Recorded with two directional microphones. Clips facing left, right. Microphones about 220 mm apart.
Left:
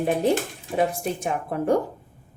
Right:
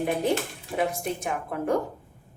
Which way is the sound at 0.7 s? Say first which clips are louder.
Left 3 dB; 30° left (ahead or behind).